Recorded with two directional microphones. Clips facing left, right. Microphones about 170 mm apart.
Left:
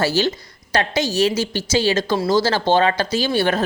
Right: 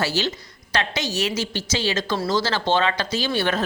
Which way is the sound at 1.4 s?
10° left (ahead or behind).